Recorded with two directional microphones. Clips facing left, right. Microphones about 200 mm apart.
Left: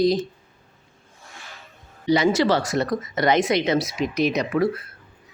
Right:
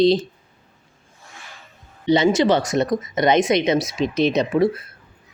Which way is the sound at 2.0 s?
25° right (ahead or behind).